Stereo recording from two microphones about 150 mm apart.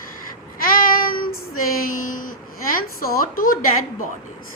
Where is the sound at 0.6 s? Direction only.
75° left (ahead or behind).